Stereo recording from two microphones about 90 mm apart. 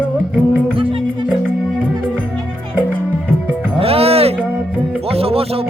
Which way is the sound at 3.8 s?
90° right.